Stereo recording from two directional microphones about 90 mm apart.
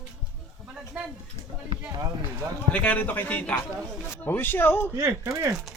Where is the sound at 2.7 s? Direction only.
15° left (ahead or behind).